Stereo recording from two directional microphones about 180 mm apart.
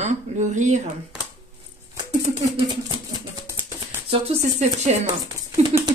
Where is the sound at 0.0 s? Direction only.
40° right (ahead or behind).